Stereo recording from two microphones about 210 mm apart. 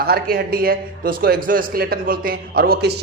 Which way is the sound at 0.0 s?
50° right (ahead or behind).